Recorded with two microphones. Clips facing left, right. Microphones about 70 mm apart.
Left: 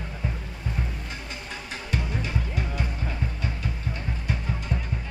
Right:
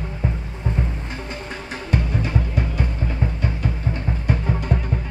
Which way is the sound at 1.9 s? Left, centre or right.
Right.